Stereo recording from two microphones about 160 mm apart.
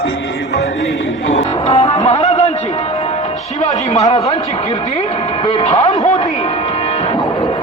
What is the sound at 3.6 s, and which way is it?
Speech, 45° left (ahead or behind).